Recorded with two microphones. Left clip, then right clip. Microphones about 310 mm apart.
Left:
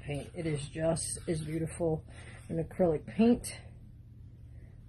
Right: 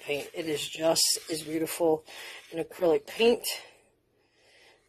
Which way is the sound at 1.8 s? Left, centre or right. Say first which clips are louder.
Right 7 dB; right.